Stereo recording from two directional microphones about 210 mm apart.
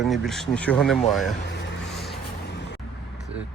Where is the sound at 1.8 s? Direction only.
Centre (ahead or behind).